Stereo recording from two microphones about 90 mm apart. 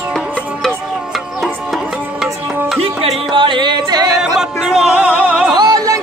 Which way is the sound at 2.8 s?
90° right.